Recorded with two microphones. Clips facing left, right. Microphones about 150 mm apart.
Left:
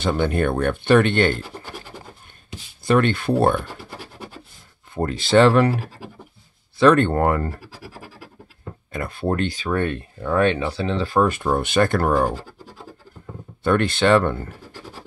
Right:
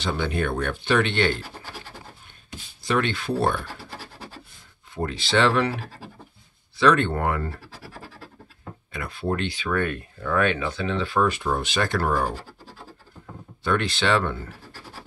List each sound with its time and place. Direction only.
0.0 s speech: 50° left (ahead or behind)
2.8 s speech: 50° left (ahead or behind)
4.9 s speech: 50° left (ahead or behind)
6.8 s speech: 50° left (ahead or behind)
7.8 s scratch: 15° left (ahead or behind)
8.9 s speech: 50° left (ahead or behind)
9.7 s speech: 30° left (ahead or behind); by 12.3 s 50° left (ahead or behind)
13.7 s speech: 50° left (ahead or behind)